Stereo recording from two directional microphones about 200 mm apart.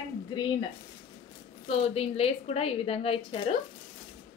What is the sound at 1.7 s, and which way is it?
A woman's voice, 30° left (ahead or behind).